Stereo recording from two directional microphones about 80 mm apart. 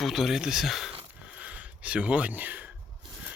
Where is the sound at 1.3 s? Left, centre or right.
Centre.